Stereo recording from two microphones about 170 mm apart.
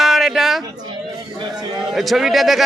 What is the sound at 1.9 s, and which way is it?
Speech, centre (ahead or behind).